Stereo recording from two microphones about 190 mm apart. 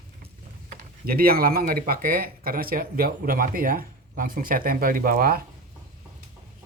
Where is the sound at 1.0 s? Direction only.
50° right (ahead or behind).